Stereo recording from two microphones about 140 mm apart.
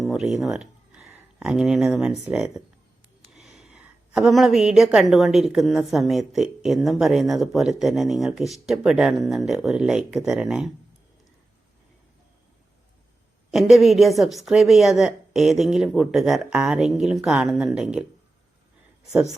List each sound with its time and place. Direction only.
0.0 s a sound: 5° right (ahead or behind)
0.4 s a woman's voice: 5° right (ahead or behind)
13.5 s a woman's voice: centre (ahead or behind)